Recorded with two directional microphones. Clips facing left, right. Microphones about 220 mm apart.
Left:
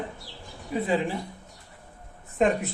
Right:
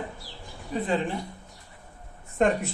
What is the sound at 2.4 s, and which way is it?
Speech, centre (ahead or behind).